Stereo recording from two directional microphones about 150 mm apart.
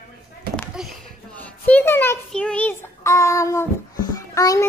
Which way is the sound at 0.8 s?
5° right (ahead or behind).